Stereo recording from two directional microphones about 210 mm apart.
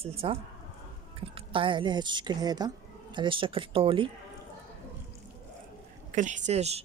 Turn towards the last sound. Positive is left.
turn(degrees=-30)  # may be behind; listen again after turning